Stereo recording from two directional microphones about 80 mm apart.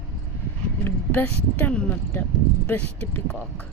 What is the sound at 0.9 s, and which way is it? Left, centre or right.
Speech, left.